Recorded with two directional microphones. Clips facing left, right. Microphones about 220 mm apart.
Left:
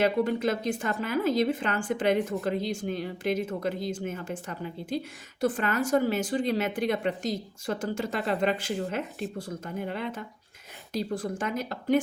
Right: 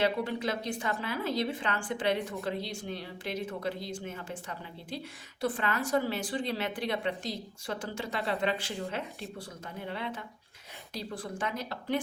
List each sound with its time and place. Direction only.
0.0 s speech: 45° left (ahead or behind)